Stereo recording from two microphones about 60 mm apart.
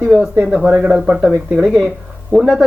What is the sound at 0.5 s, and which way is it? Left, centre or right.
Speech, right.